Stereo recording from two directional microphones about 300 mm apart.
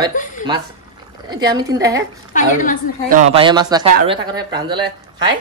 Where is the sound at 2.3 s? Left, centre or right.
Left.